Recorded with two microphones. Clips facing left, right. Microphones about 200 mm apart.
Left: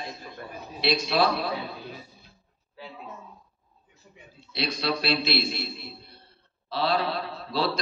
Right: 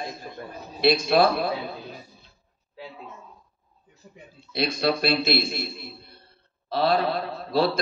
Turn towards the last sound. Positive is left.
turn(degrees=-45)  # may be behind; listen again after turning